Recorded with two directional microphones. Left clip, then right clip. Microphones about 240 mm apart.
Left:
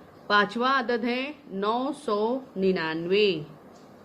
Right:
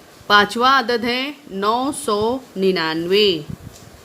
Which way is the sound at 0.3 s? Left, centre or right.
Centre.